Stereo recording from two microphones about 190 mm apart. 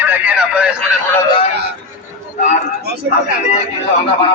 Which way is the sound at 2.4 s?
40° left (ahead or behind).